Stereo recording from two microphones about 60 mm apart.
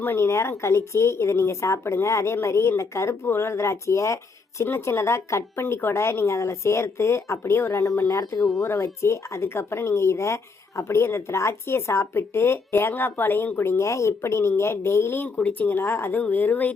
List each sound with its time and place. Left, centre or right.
0.0 s speech: left
0.3 s speech: left
4.6 s speech: left
15.4 s speech: left